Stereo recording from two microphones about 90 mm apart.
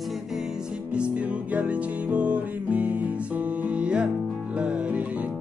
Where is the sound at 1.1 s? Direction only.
15° right (ahead or behind).